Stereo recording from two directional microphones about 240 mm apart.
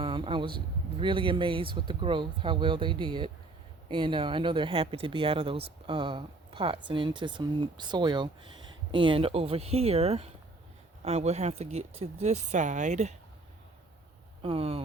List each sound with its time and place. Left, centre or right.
0.0 s speech: right
14.4 s speech: right